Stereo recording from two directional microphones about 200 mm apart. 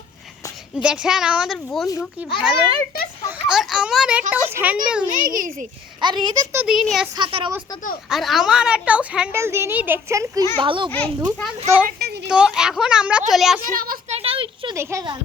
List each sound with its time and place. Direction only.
0.8 s a child's voice: 5° right (ahead or behind)
5.0 s a child's voice: 45° right (ahead or behind)
6.0 s a child's voice: 20° right (ahead or behind)
6.7 s speech: centre (ahead or behind)
7.2 s a child's voice: 25° right (ahead or behind)
8.1 s a woman's voice: centre (ahead or behind); by 10.9 s 25° right (ahead or behind)
11.9 s a sound: 50° right (ahead or behind)
12.3 s speech: 5° right (ahead or behind)
13.7 s a child's voice: 45° right (ahead or behind)
14.1 s a sound: 30° right (ahead or behind)
14.8 s a woman's voice: 15° right (ahead or behind)